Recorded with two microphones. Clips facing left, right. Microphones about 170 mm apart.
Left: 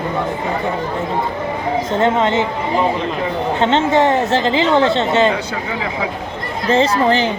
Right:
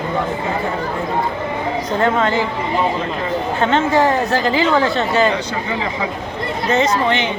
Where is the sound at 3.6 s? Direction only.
25° left (ahead or behind).